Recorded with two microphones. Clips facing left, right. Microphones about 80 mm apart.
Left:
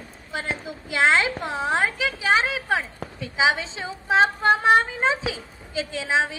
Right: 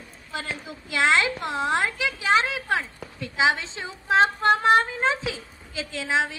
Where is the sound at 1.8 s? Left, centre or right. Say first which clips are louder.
Left 2 dB; centre.